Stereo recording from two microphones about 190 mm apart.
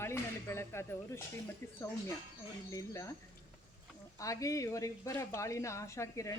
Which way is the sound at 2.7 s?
15° left (ahead or behind).